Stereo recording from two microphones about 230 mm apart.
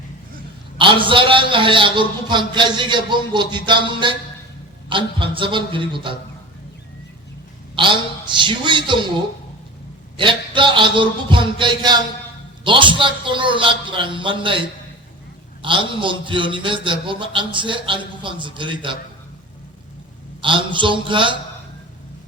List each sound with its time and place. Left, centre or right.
0.8 s a man's voice: right
7.8 s a man's voice: right
10.2 s a man's voice: right
15.6 s a man's voice: right
20.4 s a man's voice: right